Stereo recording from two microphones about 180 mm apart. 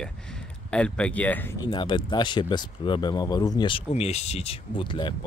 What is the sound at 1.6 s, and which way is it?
Speech, 25° left (ahead or behind).